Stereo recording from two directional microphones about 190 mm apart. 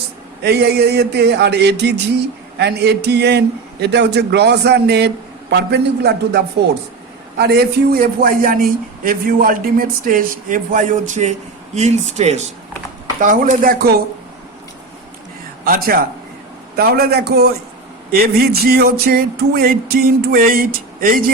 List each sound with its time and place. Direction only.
0.4 s a man's voice: 60° right (ahead or behind)
15.6 s a man's voice: 50° right (ahead or behind)